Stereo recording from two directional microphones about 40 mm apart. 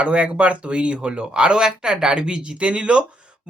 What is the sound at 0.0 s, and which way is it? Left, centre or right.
A woman's voice, right.